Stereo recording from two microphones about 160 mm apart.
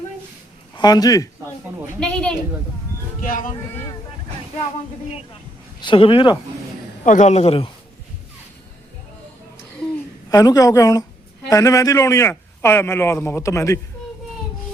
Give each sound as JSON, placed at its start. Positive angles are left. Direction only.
{"t": 0.8, "sound": "a woman's voice", "side_deg": 25}
{"t": 2.0, "sound": "a woman's voice", "side_deg": 5}
{"t": 3.2, "sound": "speech", "side_deg": 60}
{"t": 5.8, "sound": "speech", "side_deg": 30}
{"t": 7.0, "sound": "a man's voice", "side_deg": 50}
{"t": 10.2, "sound": "a woman's voice", "side_deg": 20}